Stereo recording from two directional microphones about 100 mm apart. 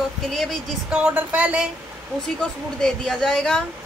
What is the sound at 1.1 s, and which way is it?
Speech, 15° right (ahead or behind).